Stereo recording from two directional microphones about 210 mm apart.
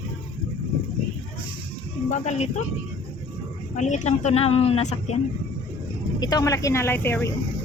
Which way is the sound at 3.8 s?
35° left (ahead or behind).